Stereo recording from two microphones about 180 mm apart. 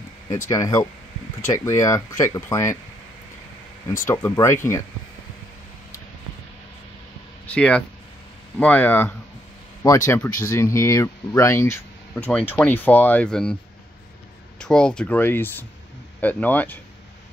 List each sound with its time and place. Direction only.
0.5 s speech: 20° left (ahead or behind)
4.0 s speech: 15° left (ahead or behind)
7.5 s speech: 5° left (ahead or behind)
14.6 s speech: 5° left (ahead or behind)